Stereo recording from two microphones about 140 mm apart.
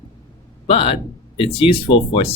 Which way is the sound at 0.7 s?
40° left (ahead or behind).